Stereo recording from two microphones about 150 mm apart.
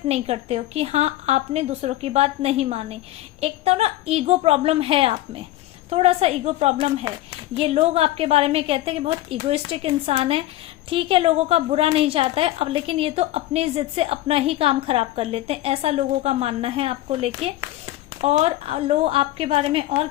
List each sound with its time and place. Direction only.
0.1 s a woman's voice: 45° right (ahead or behind)